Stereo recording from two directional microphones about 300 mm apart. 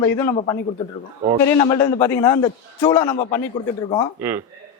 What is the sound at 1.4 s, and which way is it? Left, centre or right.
A man's voice, centre.